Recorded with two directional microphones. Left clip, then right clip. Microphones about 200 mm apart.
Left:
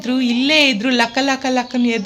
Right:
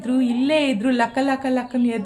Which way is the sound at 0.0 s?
15° left (ahead or behind).